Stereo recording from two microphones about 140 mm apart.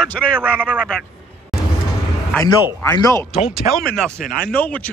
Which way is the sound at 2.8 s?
25° left (ahead or behind).